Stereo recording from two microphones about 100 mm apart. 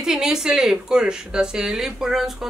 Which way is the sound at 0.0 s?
5° right (ahead or behind).